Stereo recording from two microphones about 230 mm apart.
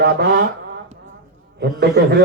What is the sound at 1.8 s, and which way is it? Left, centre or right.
Speech, right.